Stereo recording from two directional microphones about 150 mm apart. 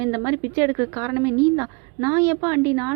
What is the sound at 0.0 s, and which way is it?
A woman's voice, 20° right (ahead or behind).